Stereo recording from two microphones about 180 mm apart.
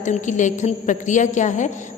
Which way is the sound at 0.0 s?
40° left (ahead or behind).